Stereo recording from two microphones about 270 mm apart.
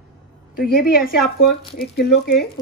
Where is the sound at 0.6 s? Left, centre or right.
Left.